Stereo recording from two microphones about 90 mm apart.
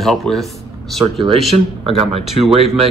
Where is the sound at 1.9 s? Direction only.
90° right.